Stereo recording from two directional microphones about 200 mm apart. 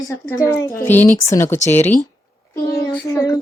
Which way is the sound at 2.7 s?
15° left (ahead or behind).